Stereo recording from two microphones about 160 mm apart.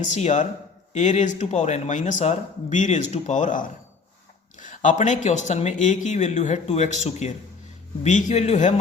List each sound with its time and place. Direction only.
0.0 s speech: 45° left (ahead or behind)